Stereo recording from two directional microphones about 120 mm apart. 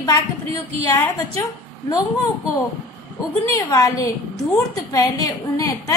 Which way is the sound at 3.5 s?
30° left (ahead or behind).